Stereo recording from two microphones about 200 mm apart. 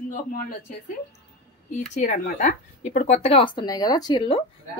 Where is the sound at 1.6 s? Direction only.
40° left (ahead or behind).